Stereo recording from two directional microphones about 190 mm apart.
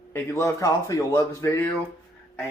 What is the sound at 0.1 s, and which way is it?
A man's voice, 15° left (ahead or behind).